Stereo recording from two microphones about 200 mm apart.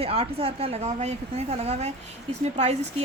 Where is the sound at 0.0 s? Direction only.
30° right (ahead or behind).